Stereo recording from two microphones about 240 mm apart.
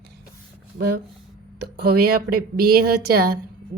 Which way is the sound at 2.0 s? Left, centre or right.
Right.